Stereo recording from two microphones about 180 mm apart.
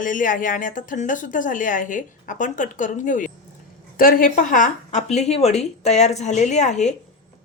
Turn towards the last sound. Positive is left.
turn(degrees=40)  # may be behind; listen again after turning